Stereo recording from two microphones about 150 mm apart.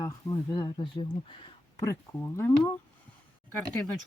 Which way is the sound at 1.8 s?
15° left (ahead or behind).